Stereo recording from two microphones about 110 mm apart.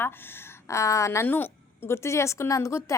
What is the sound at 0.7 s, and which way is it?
A woman's voice, 30° left (ahead or behind).